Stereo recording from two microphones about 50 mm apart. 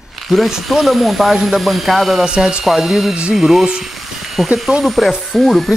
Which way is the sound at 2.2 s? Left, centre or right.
Centre.